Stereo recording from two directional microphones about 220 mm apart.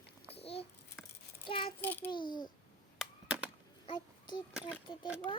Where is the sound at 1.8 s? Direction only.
10° left (ahead or behind).